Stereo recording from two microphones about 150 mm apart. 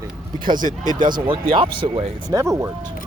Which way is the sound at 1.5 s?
35° right (ahead or behind).